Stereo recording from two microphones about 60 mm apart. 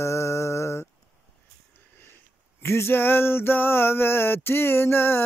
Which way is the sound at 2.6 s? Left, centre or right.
Left.